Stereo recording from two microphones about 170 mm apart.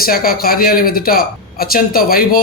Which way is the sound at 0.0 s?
60° left (ahead or behind).